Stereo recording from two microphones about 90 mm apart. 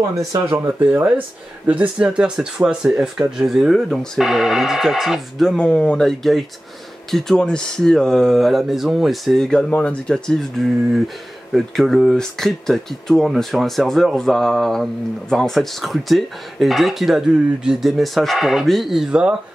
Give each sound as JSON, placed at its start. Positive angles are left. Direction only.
{"t": 0.7, "sound": "speech", "side_deg": -20}